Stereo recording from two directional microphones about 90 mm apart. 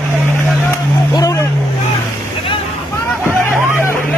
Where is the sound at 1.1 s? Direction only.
35° left (ahead or behind).